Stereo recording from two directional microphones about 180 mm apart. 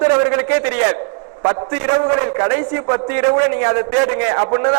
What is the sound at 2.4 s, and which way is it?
A man's voice, 20° right (ahead or behind).